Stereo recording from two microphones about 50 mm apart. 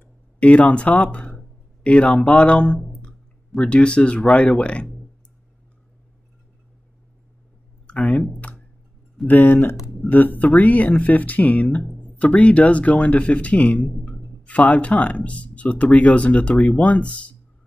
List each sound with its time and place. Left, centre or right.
0.0 s speech: left
7.8 s clicking: centre
8.3 s a sound: left
9.3 s speech: left